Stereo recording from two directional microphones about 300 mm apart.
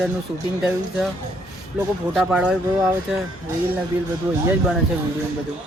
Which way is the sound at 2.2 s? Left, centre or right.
Centre.